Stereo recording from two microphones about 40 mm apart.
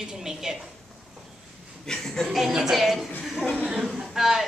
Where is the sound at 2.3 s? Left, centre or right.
Centre.